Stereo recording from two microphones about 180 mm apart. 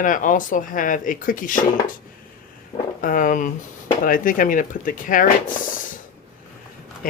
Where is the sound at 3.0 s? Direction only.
50° left (ahead or behind).